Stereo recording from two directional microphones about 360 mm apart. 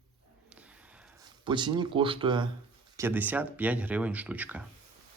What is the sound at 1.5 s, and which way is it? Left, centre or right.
Speech, centre.